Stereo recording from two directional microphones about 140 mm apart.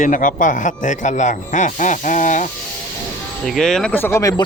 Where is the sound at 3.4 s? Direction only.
Centre (ahead or behind).